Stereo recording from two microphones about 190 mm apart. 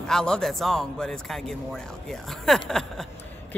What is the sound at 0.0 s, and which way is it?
A man's voice, 5° left (ahead or behind).